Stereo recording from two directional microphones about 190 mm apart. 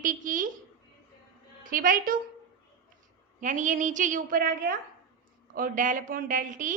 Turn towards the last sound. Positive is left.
turn(degrees=-45)  # may be behind; listen again after turning